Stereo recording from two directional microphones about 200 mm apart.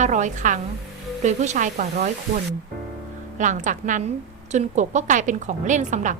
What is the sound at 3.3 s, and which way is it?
A woman's voice, 40° right (ahead or behind).